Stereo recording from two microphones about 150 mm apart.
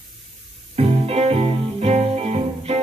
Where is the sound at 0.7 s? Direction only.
40° right (ahead or behind).